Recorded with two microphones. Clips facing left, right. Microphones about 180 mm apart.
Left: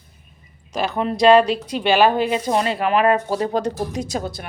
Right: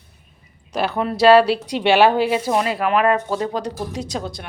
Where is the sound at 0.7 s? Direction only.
10° right (ahead or behind).